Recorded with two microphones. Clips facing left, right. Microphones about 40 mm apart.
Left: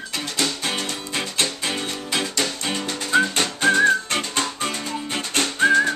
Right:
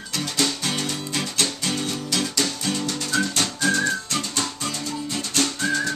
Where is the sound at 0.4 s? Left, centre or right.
Centre.